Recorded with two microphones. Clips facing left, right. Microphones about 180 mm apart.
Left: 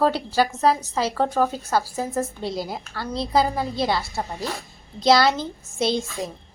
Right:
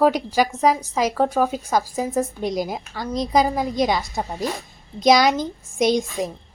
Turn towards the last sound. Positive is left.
turn(degrees=-15)  # may be behind; listen again after turning